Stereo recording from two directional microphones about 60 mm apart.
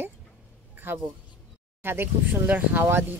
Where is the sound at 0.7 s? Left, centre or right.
Right.